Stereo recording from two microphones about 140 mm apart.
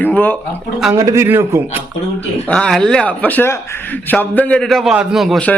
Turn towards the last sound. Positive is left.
turn(degrees=0)  # may be behind; listen again after turning